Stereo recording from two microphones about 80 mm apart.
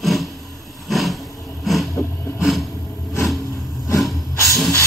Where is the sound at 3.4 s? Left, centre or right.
Left.